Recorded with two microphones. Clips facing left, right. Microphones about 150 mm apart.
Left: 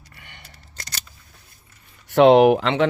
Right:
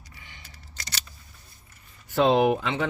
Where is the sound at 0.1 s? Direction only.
65° left (ahead or behind).